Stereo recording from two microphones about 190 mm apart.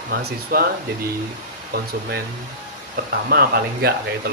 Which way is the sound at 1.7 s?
50° right (ahead or behind).